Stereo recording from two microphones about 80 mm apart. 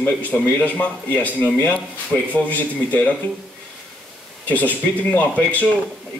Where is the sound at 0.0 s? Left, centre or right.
Centre.